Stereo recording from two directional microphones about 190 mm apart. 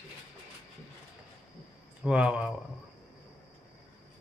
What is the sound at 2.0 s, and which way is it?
Speech, 5° right (ahead or behind).